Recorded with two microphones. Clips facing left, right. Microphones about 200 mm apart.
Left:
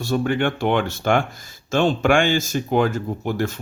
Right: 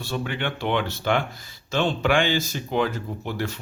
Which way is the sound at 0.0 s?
45° left (ahead or behind).